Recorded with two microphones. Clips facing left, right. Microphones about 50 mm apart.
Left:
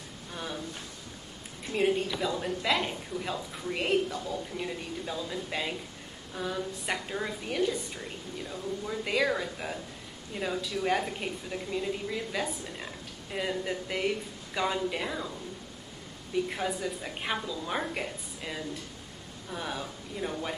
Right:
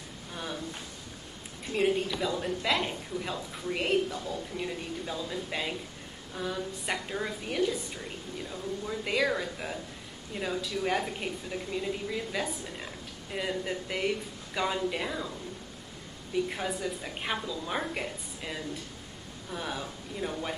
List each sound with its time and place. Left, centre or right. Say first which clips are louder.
0.3 s a sound: even; centre
1.7 s a woman's voice: even; centre
16.4 s a woman's voice: left 1 dB; centre